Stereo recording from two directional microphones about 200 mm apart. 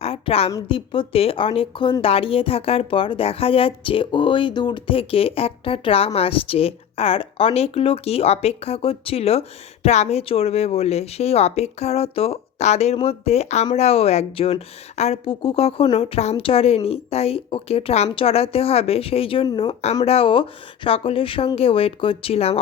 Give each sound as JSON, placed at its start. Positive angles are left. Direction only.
{"t": 0.0, "sound": "a woman's voice", "side_deg": 30}